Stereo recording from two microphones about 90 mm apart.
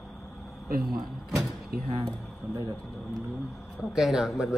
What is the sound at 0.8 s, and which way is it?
Speech, centre (ahead or behind).